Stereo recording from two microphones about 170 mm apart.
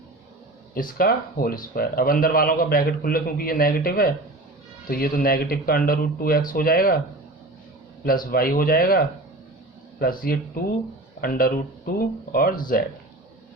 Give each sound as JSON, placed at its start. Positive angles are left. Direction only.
{"t": 0.7, "sound": "speech", "side_deg": 60}
{"t": 8.0, "sound": "speech", "side_deg": 60}